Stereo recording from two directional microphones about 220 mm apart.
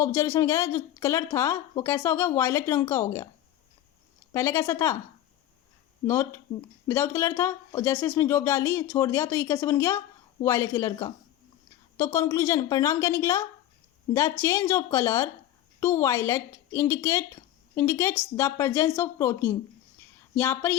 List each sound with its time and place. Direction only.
0.0 s speech: 10° left (ahead or behind)
4.3 s speech: 10° left (ahead or behind)
6.1 s speech: 10° left (ahead or behind)